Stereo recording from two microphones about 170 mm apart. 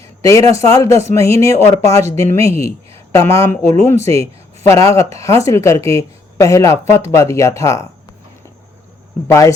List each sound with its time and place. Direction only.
0.2 s speech: 20° left (ahead or behind)
9.2 s speech: 15° left (ahead or behind)